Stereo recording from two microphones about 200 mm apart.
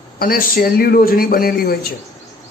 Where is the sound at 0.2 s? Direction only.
45° left (ahead or behind).